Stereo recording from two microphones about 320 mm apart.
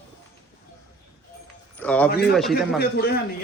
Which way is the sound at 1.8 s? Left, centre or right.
Centre.